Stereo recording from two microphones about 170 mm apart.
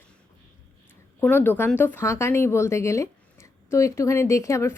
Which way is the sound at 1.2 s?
10° left (ahead or behind).